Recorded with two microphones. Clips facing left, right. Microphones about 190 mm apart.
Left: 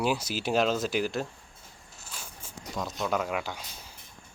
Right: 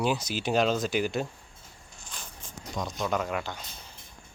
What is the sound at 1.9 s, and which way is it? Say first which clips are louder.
Zipper: even; 5° left (ahead or behind).